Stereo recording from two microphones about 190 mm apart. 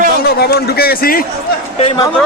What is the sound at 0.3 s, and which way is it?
Speech, 55° left (ahead or behind).